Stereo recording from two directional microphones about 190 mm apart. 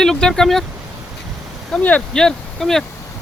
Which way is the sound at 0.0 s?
5° left (ahead or behind).